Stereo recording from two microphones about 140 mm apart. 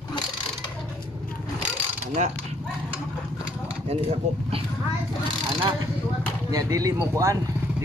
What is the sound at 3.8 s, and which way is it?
Speech, 45° right (ahead or behind).